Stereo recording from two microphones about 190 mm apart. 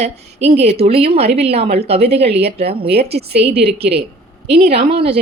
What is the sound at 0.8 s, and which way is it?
Speech, 30° right (ahead or behind).